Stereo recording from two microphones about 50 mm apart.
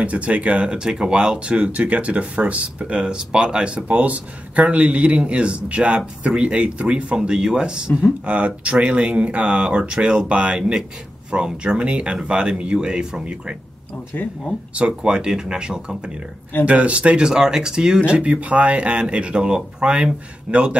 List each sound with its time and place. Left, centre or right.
0.0 s speech: right
14.1 s speech: left
14.7 s speech: right
16.6 s speech: right